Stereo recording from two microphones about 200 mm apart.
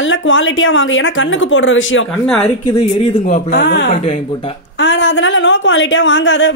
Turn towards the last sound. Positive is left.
turn(degrees=65)  # may be behind; listen again after turning